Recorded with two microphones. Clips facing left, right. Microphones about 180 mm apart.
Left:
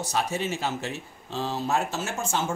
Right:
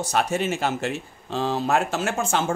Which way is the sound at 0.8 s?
70° right (ahead or behind).